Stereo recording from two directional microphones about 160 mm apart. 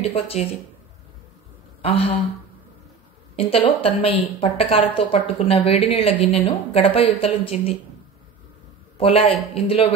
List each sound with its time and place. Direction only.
0.0 s a woman's voice: 40° left (ahead or behind)
1.8 s speech: 40° left (ahead or behind)
3.3 s a woman's voice: 35° left (ahead or behind)
8.9 s a woman's voice: 35° left (ahead or behind)